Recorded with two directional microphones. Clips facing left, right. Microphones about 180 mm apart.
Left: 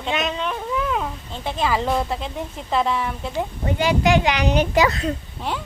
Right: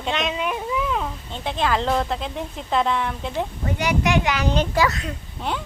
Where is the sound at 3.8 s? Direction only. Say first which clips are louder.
Left 3 dB; 25° left (ahead or behind).